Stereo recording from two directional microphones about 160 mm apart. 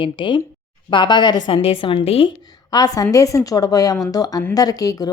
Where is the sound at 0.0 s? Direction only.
30° left (ahead or behind).